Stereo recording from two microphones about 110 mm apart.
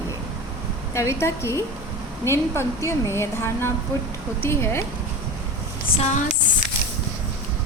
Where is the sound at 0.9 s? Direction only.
25° left (ahead or behind).